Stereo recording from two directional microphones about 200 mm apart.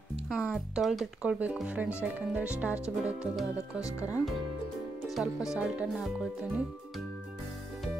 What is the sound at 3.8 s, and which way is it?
Speech, 15° left (ahead or behind).